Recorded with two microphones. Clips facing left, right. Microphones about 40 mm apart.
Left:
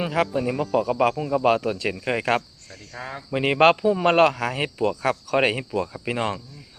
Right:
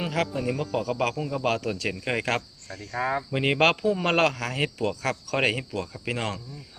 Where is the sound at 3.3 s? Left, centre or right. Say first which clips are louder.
Left 5 dB; centre.